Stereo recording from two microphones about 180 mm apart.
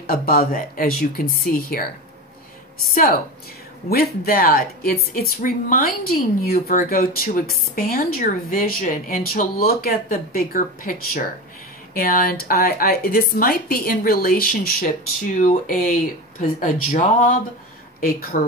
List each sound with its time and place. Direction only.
0.0 s a woman's voice: 55° left (ahead or behind)
2.9 s a woman's voice: 55° left (ahead or behind)
18.3 s a woman's voice: 50° left (ahead or behind)